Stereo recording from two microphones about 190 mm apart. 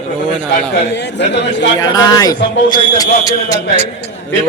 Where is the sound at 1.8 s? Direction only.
20° left (ahead or behind).